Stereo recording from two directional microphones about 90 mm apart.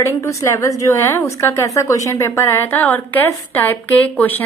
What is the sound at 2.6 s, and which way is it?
A woman's voice, 20° left (ahead or behind).